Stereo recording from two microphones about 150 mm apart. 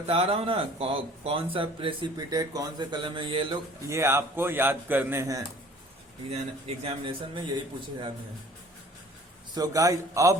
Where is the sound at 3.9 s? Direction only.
15° right (ahead or behind).